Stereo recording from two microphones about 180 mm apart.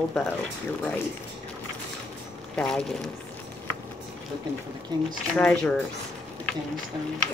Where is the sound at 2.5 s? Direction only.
5° left (ahead or behind).